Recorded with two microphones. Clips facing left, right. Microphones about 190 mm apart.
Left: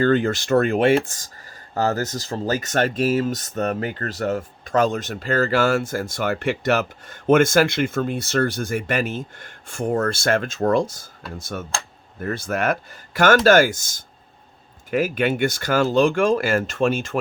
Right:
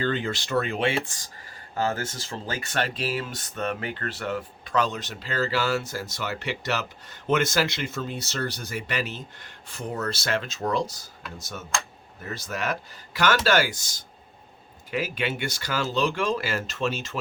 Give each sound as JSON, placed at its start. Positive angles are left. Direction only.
{"t": 0.0, "sound": "speech", "side_deg": 45}